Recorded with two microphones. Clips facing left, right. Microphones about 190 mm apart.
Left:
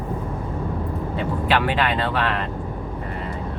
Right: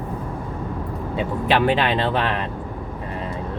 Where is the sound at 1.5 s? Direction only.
25° right (ahead or behind).